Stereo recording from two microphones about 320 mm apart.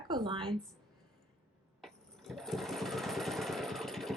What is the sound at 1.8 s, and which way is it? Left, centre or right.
Lawn mower, centre.